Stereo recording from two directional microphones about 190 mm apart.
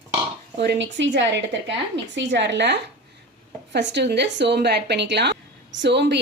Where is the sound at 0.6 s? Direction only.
65° right (ahead or behind).